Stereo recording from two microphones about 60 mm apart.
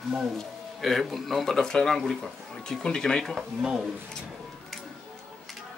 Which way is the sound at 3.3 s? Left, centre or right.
Centre.